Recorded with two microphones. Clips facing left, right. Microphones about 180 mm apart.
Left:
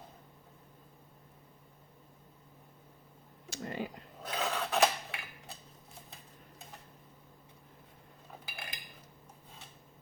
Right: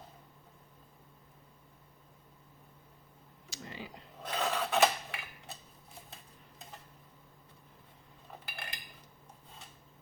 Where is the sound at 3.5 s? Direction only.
50° left (ahead or behind).